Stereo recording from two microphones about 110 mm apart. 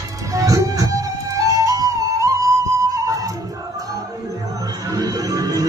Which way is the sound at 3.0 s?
30° right (ahead or behind).